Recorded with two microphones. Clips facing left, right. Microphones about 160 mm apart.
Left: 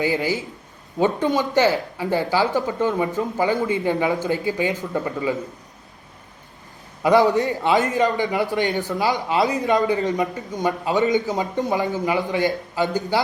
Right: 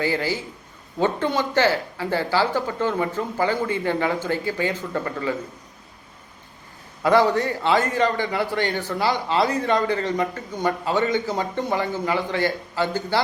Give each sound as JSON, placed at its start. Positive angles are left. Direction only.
{"t": 0.0, "sound": "speech", "side_deg": 15}
{"t": 7.0, "sound": "a man's voice", "side_deg": 20}